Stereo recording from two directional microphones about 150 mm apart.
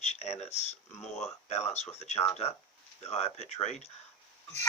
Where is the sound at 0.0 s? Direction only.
45° left (ahead or behind).